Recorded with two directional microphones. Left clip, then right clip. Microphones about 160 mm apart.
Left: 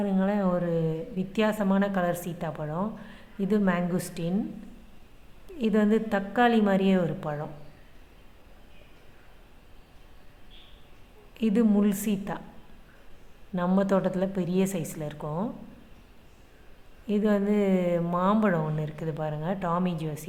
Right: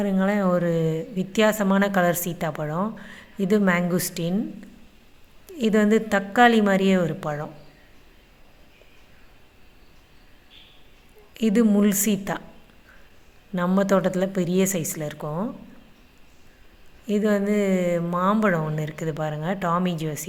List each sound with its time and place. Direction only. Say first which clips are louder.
0.0 s a woman's voice: right 4 dB; 20° right (ahead or behind)
5.5 s speech: right 5 dB; 15° right (ahead or behind)
11.3 s speech: right 4 dB; 15° right (ahead or behind)
13.6 s speech: right 4 dB; 15° right (ahead or behind)
17.1 s speech: right 3 dB; 10° right (ahead or behind)